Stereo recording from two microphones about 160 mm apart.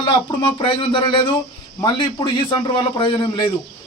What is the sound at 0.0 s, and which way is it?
A man's voice, 30° left (ahead or behind).